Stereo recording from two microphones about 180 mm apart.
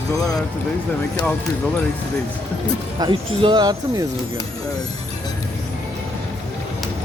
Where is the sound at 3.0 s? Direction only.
25° right (ahead or behind).